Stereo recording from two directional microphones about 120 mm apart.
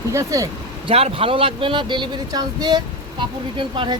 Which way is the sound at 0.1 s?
25° right (ahead or behind).